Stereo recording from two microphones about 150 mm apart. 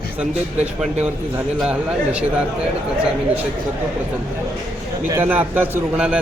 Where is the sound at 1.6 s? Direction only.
10° right (ahead or behind).